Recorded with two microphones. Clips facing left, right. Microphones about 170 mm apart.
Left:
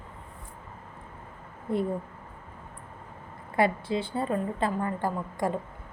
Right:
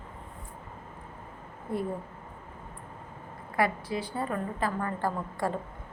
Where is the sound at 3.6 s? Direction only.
25° left (ahead or behind).